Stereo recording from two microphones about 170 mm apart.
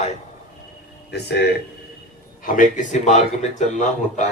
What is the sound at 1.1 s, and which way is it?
Speech, 75° left (ahead or behind).